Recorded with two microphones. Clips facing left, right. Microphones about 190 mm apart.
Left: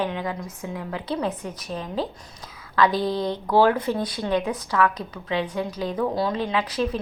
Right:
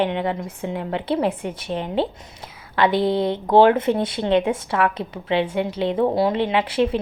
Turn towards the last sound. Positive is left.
turn(degrees=-25)  # may be behind; listen again after turning